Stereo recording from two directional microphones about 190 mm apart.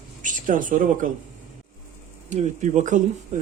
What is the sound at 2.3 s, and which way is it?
Speech, 40° right (ahead or behind).